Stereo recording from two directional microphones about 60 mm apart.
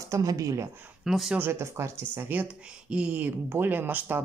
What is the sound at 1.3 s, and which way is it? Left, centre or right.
Speech, right.